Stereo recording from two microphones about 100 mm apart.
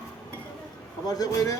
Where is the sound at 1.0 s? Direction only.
40° left (ahead or behind).